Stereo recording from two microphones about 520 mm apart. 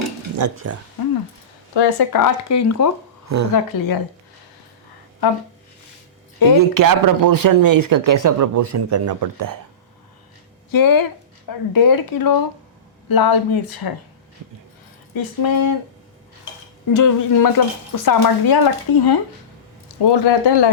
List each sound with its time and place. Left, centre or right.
0.3 s speech: right
1.7 s speech: left
3.2 s speech: right
3.5 s speech: left
6.6 s speech: right
10.7 s speech: left
15.1 s speech: left
16.9 s speech: left